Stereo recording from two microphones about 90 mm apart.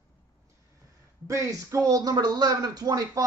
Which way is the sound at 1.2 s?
35° right (ahead or behind).